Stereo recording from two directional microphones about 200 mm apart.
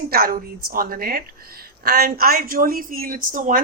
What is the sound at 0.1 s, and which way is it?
A woman's voice, 45° right (ahead or behind).